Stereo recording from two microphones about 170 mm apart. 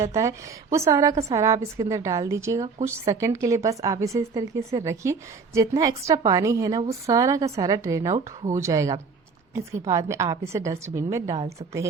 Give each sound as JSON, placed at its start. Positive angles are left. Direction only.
{"t": 0.0, "sound": "a woman's voice", "side_deg": -20}